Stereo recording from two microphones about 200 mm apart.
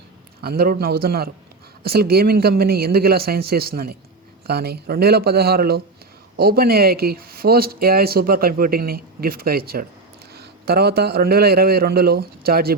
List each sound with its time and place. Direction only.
0.4 s speech: 50° right (ahead or behind)